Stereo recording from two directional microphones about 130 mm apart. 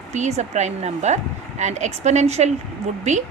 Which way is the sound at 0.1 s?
60° right (ahead or behind).